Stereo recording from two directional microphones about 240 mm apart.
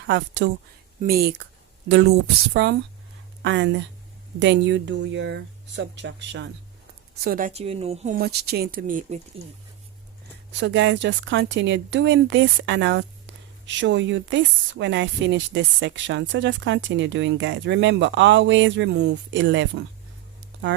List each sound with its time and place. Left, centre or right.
0.0 s speech: right
7.2 s a woman's voice: right
8.2 s speech: right
10.6 s speech: right